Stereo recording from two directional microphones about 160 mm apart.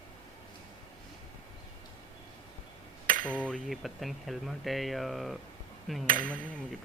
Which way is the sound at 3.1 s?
60° right (ahead or behind).